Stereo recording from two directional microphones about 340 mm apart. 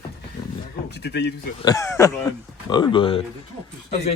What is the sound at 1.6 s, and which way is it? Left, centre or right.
Speech, centre.